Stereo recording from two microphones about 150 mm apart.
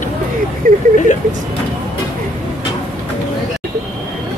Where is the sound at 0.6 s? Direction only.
70° right (ahead or behind).